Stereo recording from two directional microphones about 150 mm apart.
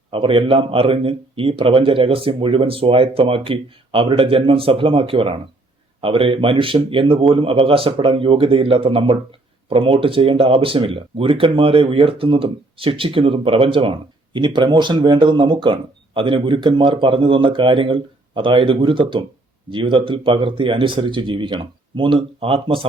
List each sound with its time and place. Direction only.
0.1 s speech: 35° right (ahead or behind)